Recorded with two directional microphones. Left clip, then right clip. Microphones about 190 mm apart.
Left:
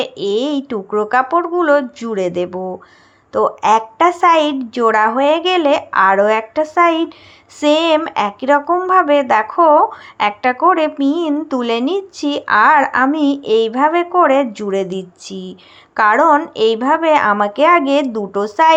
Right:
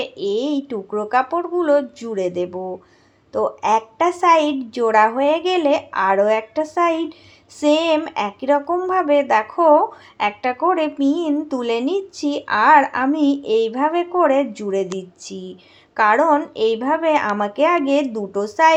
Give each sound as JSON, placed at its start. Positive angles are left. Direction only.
{"t": 0.0, "sound": "a woman's voice", "side_deg": 15}